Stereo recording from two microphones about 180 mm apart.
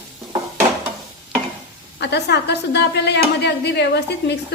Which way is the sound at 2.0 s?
70° left (ahead or behind).